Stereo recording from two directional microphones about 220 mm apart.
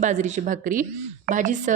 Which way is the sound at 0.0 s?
35° right (ahead or behind).